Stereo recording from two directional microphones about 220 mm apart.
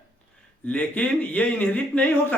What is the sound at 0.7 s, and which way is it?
Speech, 5° left (ahead or behind).